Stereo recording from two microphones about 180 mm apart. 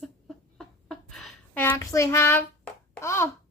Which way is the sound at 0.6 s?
Centre (ahead or behind).